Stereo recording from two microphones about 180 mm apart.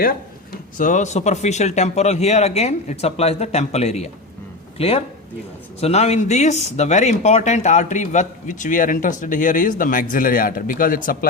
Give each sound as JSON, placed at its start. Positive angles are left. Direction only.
{"t": 0.8, "sound": "speech", "side_deg": 45}